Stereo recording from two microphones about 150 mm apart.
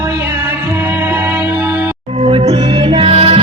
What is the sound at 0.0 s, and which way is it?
Music, 15° right (ahead or behind).